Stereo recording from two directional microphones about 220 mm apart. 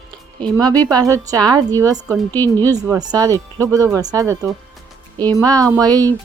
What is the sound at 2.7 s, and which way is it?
Speech, 15° right (ahead or behind).